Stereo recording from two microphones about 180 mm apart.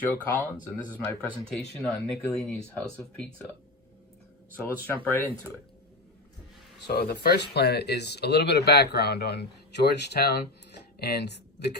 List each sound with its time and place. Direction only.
0.3 s speech: 10° left (ahead or behind)
5.0 s speech: 10° left (ahead or behind)
6.8 s speech: 60° left (ahead or behind)